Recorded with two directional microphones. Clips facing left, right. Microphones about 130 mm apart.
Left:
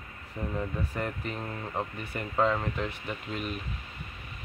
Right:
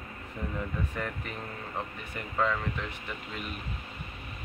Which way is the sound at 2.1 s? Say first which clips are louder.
Left 3 dB; 30° left (ahead or behind).